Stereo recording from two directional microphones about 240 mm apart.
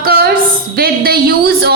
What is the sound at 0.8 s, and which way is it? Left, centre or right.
Speech, right.